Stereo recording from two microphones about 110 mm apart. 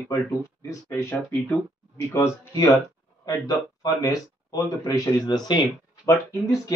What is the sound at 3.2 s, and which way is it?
Speech, 35° left (ahead or behind).